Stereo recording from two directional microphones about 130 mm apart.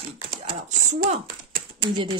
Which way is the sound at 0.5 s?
80° right.